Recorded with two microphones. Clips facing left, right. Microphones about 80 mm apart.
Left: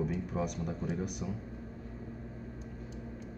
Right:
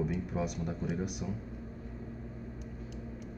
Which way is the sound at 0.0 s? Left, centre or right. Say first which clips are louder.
Even; centre.